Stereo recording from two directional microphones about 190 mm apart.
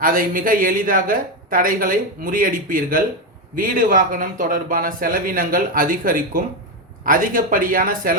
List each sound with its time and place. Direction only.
0.0 s speech: 50° right (ahead or behind)